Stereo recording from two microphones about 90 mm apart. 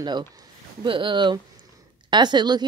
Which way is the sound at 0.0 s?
50° right (ahead or behind).